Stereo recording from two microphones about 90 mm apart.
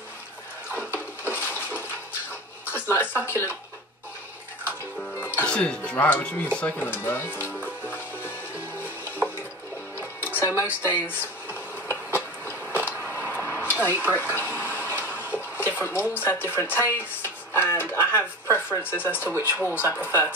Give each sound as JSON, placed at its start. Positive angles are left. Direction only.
{"t": 0.7, "sound": "a sound", "side_deg": 25}
{"t": 2.6, "sound": "music", "side_deg": 25}
{"t": 5.1, "sound": "music", "side_deg": 25}
{"t": 5.5, "sound": "speech", "side_deg": 10}
{"t": 7.4, "sound": "music", "side_deg": 20}
{"t": 10.2, "sound": "music", "side_deg": 25}
{"t": 10.6, "sound": "speech", "side_deg": 25}
{"t": 11.9, "sound": "a sound", "side_deg": 25}
{"t": 13.7, "sound": "stir", "side_deg": 20}
{"t": 14.0, "sound": "a sound", "side_deg": 25}
{"t": 15.5, "sound": "speech", "side_deg": 25}